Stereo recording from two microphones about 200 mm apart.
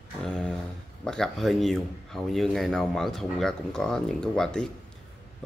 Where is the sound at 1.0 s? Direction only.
5° left (ahead or behind).